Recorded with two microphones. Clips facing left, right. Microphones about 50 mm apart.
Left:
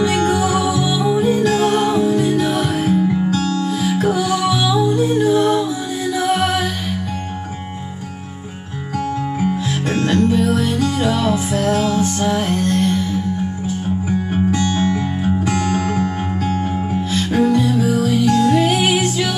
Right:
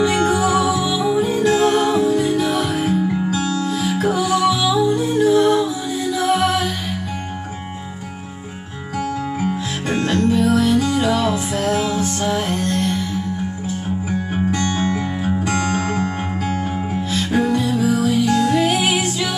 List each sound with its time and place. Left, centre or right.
0.0 s music: centre
9.4 s music: centre
14.7 s music: right
15.2 s music: centre
17.1 s music: centre